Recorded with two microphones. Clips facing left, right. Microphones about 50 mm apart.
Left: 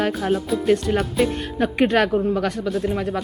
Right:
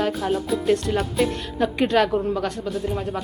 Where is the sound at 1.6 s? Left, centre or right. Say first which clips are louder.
Left 1 dB; left.